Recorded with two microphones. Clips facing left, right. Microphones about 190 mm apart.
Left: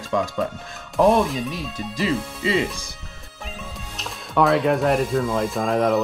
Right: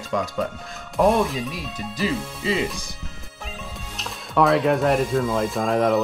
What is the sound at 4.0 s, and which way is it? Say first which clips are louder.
Speech: even; centre (ahead or behind).